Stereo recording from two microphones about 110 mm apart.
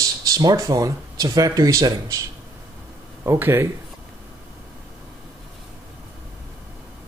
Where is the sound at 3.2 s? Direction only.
20° right (ahead or behind).